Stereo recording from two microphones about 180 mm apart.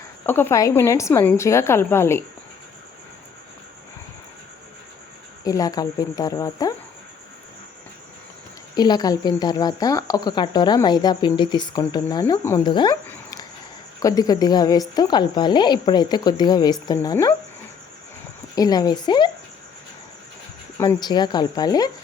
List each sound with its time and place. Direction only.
0.3 s a woman's voice: 10° left (ahead or behind)
5.4 s speech: 20° left (ahead or behind)
8.7 s a woman's voice: 25° left (ahead or behind)
14.0 s speech: 20° left (ahead or behind)
18.5 s speech: 20° left (ahead or behind)
20.7 s speech: 20° left (ahead or behind)